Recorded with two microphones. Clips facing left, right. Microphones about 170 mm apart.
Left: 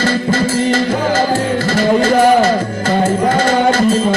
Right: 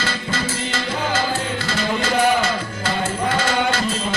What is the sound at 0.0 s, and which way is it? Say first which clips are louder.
Music: left 10 dB; 50° left (ahead or behind).